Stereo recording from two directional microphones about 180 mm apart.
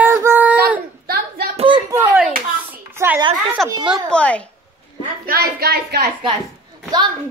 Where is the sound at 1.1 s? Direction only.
60° right (ahead or behind).